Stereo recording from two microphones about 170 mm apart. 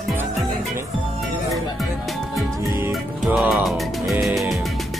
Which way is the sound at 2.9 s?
Centre (ahead or behind).